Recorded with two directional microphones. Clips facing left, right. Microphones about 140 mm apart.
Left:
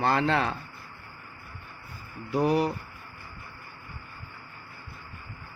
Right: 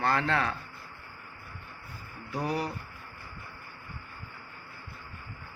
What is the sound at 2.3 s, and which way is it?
Speech, 15° left (ahead or behind).